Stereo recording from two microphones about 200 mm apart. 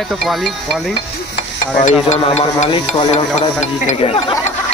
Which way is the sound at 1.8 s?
35° left (ahead or behind).